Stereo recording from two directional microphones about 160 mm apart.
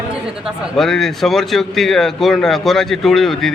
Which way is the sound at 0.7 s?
Centre (ahead or behind).